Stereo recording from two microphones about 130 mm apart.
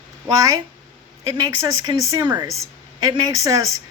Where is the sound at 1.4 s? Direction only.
30° right (ahead or behind).